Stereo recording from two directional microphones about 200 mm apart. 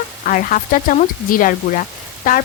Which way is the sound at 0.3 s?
45° left (ahead or behind).